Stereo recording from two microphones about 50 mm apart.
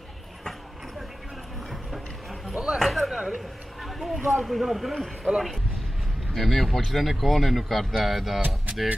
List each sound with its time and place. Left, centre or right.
2.4 s basketball bounce: centre
2.8 s a sound: centre
4.3 s speech: centre
6.3 s speech: centre
8.4 s speech: right